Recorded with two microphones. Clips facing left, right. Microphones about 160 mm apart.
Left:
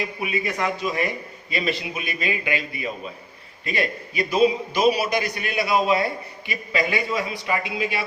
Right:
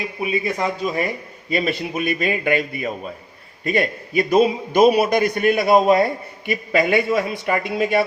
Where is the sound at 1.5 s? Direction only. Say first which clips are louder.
Right 4 dB; 45° right (ahead or behind).